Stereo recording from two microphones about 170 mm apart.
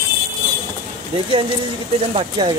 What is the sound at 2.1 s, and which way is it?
Speech, 30° right (ahead or behind).